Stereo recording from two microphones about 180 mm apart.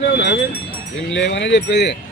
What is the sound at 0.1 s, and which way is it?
Speech, 70° left (ahead or behind).